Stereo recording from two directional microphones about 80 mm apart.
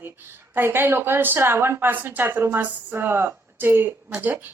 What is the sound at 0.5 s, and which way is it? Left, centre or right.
A woman's voice, right.